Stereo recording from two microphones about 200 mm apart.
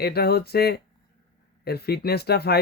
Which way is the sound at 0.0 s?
50° left (ahead or behind).